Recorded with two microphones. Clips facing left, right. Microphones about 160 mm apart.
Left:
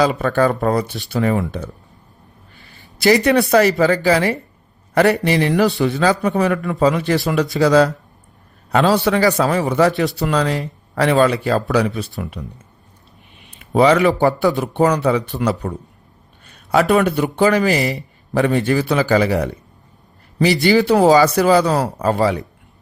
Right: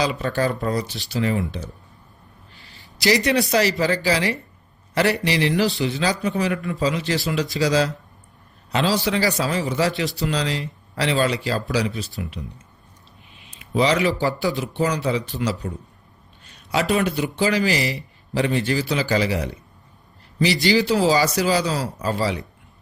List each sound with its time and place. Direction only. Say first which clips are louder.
0.0 s speech: left 6 dB; 50° left (ahead or behind)
3.0 s a man's voice: left 6 dB; 55° left (ahead or behind)
13.5 s a man's voice: left 7 dB; 55° left (ahead or behind)
16.6 s a man's voice: left 6 dB; 55° left (ahead or behind)